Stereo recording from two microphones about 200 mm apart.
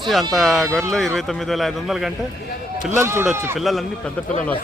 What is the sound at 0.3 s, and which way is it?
A man's voice, centre (ahead or behind).